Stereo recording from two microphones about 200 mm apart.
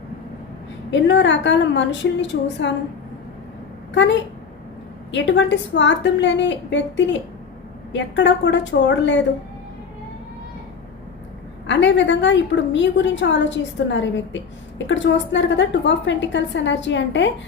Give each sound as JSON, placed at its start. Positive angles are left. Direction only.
{"t": 0.9, "sound": "a woman's voice", "side_deg": 65}
{"t": 3.9, "sound": "a woman's voice", "side_deg": 65}
{"t": 11.6, "sound": "a woman's voice", "side_deg": 65}